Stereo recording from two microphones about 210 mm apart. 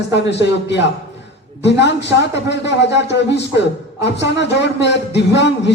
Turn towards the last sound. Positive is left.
turn(degrees=55)  # may be behind; listen again after turning